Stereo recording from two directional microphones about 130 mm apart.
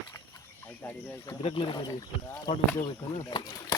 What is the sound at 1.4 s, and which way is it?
Speech, 45° left (ahead or behind).